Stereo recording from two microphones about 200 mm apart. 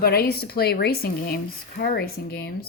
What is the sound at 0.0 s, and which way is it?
A woman's voice, 50° left (ahead or behind).